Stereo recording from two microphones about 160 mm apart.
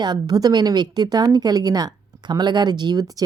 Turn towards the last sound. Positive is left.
turn(degrees=-25)  # may be behind; listen again after turning